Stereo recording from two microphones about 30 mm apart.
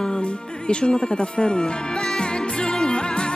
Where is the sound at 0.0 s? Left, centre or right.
Left.